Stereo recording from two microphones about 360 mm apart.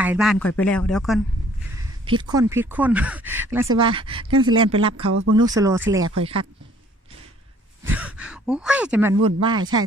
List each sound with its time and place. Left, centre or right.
0.0 s speech: centre
1.8 s speech: centre
7.8 s speech: centre